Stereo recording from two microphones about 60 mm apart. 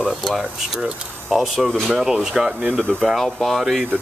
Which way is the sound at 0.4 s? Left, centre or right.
Centre.